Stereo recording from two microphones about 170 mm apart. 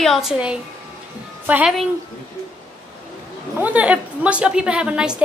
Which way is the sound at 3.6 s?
10° right (ahead or behind).